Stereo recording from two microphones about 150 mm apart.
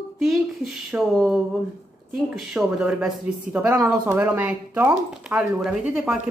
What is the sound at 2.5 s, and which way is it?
A woman's voice, 5° right (ahead or behind).